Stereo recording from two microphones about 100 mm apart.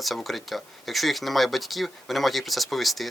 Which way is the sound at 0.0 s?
Centre (ahead or behind).